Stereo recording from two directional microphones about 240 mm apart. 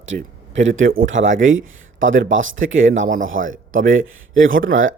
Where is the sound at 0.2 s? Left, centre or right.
Right.